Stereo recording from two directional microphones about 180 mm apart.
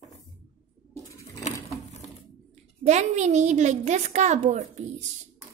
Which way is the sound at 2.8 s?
40° right (ahead or behind).